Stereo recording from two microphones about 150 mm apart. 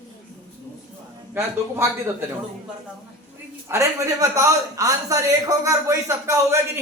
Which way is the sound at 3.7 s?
20° right (ahead or behind).